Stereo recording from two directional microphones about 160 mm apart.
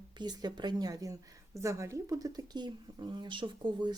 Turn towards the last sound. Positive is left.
turn(degrees=-30)  # may be behind; listen again after turning